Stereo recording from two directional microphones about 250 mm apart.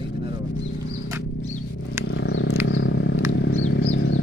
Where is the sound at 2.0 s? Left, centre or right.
Left.